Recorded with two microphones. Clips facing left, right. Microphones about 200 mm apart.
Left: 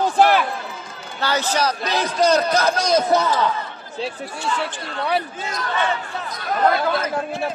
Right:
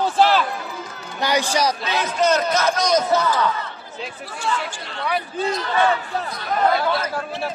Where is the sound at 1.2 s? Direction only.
15° right (ahead or behind).